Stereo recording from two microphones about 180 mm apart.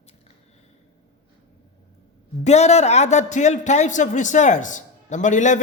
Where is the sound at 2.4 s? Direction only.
35° left (ahead or behind).